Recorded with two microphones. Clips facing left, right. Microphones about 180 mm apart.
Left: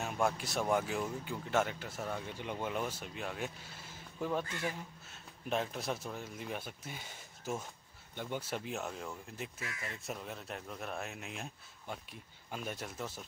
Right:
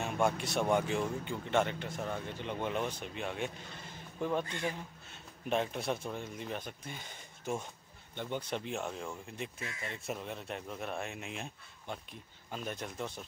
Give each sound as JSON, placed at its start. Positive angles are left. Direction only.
{"t": 0.0, "sound": "speech", "side_deg": 0}
{"t": 4.5, "sound": "speech", "side_deg": -25}
{"t": 5.5, "sound": "speech", "side_deg": 0}
{"t": 9.6, "sound": "speech", "side_deg": -25}
{"t": 10.0, "sound": "speech", "side_deg": 0}